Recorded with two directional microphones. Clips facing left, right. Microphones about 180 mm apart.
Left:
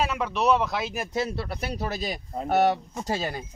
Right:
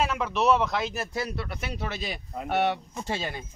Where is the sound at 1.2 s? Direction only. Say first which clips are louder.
Left 3 dB; 30° left (ahead or behind).